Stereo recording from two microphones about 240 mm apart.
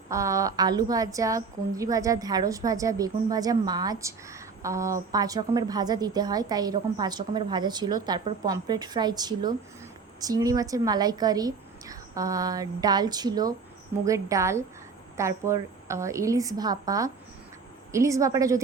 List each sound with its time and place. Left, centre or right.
0.1 s a woman's voice: centre